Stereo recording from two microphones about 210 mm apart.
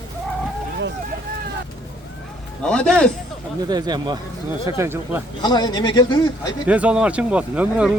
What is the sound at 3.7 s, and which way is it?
Speech, 20° right (ahead or behind).